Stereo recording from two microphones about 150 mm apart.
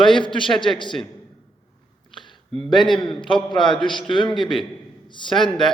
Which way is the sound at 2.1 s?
30° left (ahead or behind).